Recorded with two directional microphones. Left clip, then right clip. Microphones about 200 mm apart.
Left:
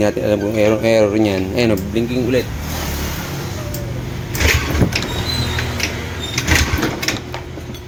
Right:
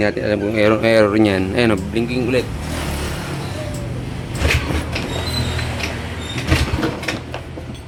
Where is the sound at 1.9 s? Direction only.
20° left (ahead or behind).